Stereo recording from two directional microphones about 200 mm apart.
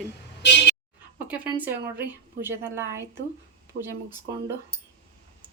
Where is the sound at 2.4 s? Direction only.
10° right (ahead or behind).